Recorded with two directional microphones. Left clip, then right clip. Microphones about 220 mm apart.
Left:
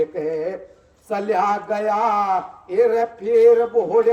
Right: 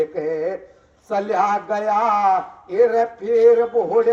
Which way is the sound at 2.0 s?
30° right (ahead or behind).